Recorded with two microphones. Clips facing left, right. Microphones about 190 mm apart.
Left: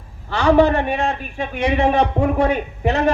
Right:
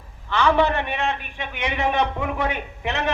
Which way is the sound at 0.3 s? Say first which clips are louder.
Left 5 dB; 40° left (ahead or behind).